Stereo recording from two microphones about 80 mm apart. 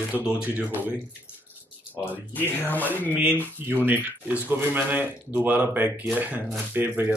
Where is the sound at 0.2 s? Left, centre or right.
Centre.